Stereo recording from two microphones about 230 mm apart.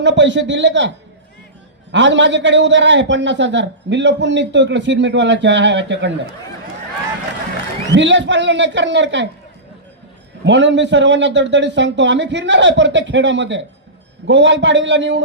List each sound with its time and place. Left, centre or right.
0.0 s a man's voice: right
7.9 s a man's voice: right
10.4 s a man's voice: right